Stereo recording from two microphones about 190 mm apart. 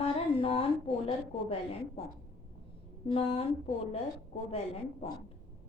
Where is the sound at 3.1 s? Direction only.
30° left (ahead or behind).